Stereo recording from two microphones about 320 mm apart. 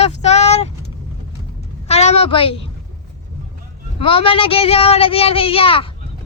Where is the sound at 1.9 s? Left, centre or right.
Centre.